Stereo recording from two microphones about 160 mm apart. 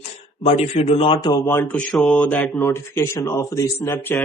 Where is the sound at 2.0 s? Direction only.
5° left (ahead or behind).